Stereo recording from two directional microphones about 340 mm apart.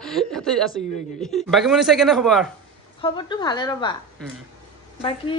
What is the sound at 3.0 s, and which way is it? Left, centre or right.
Speech, centre.